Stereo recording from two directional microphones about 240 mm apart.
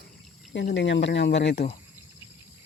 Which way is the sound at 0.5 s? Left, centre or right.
Left.